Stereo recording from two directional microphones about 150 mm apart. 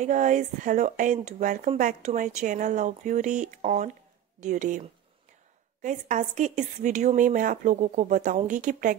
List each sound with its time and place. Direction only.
0.0 s a woman's voice: 55° right (ahead or behind)